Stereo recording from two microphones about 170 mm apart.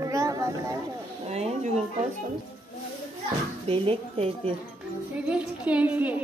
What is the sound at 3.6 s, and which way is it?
Speech, 35° right (ahead or behind).